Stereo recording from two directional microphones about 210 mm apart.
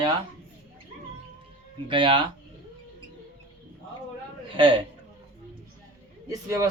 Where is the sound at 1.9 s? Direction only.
25° right (ahead or behind).